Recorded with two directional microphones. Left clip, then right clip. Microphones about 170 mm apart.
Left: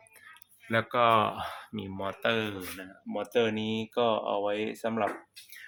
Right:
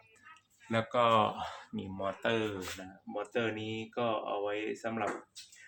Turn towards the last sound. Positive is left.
turn(degrees=55)  # may be behind; listen again after turning